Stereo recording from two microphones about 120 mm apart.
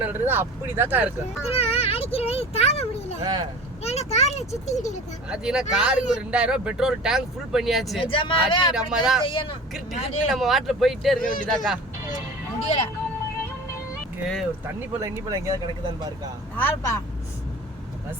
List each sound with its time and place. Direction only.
0.0 s speech: 15° right (ahead or behind)
1.5 s a sound: 55° left (ahead or behind)
3.2 s speech: 35° right (ahead or behind)
3.8 s a child's voice: 65° left (ahead or behind); by 4.9 s 80° left
5.3 s speech: 5° right (ahead or behind)
8.0 s speech: 45° left (ahead or behind)
8.7 s speech: 5° right (ahead or behind)
9.2 s speech: 45° left (ahead or behind)
10.2 s speech: centre (ahead or behind)
12.5 s vehicle: 60° left (ahead or behind)
14.8 s speech: 25° right (ahead or behind)
16.6 s speech: 20° left (ahead or behind)